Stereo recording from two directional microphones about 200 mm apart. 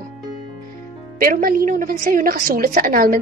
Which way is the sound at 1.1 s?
45° right (ahead or behind).